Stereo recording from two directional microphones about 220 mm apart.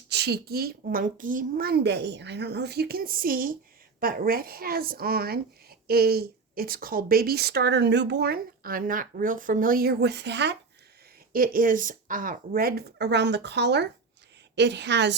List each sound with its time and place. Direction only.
0.1 s speech: 50° right (ahead or behind)
11.3 s speech: 40° right (ahead or behind)